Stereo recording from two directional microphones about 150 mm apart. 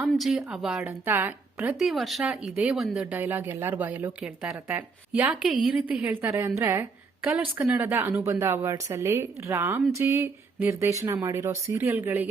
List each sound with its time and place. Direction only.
0.0 s speech: centre (ahead or behind)
1.8 s a woman's voice: centre (ahead or behind)